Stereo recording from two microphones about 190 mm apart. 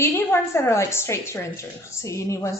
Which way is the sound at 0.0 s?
15° left (ahead or behind).